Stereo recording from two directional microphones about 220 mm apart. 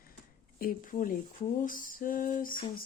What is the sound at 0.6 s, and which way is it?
Speech, 40° left (ahead or behind).